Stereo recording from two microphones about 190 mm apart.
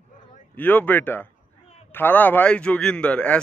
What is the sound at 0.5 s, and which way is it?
A man's voice, 10° left (ahead or behind).